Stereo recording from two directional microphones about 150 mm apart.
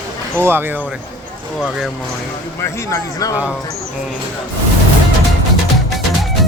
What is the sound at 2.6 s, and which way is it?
Speech, 20° left (ahead or behind).